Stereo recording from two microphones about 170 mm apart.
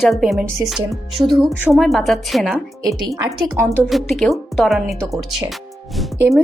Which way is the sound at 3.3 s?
15° right (ahead or behind).